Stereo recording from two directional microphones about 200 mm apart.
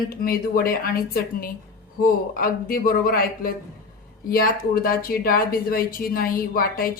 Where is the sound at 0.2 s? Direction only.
45° left (ahead or behind).